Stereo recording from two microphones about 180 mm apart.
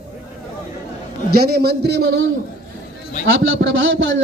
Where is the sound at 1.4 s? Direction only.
60° right (ahead or behind).